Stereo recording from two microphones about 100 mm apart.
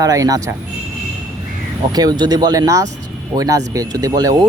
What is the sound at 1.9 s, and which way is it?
Speech, 40° right (ahead or behind).